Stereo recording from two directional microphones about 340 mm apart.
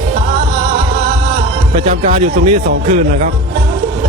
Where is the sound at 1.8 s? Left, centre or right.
Centre.